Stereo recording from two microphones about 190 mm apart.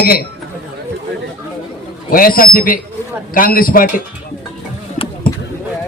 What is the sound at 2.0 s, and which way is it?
A man's voice, 50° left (ahead or behind).